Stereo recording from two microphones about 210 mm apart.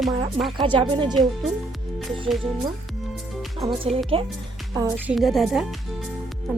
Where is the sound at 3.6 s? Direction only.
25° right (ahead or behind).